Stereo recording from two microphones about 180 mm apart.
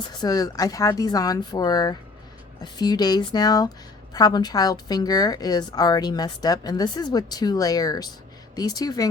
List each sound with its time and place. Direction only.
0.2 s a woman's voice: 20° left (ahead or behind)